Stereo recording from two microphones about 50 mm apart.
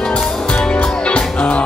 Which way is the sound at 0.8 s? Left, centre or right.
Left.